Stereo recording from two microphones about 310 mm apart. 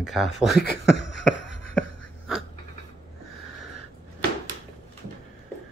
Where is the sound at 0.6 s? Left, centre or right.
Left.